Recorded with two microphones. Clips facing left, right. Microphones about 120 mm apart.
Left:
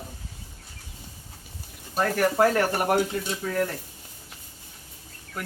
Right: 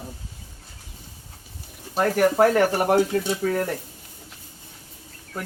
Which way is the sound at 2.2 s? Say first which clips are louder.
Right 4 dB; 15° right (ahead or behind).